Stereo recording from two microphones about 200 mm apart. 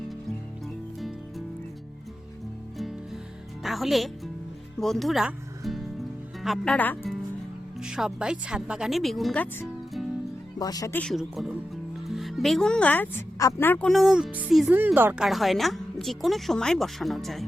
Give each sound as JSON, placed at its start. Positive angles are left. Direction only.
{"t": 3.6, "sound": "speech", "side_deg": 0}
{"t": 7.8, "sound": "speech", "side_deg": -5}
{"t": 10.6, "sound": "speech", "side_deg": 20}
{"t": 11.0, "sound": "speech", "side_deg": 0}